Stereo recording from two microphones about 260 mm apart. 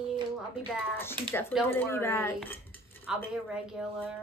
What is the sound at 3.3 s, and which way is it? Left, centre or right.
Speech, centre.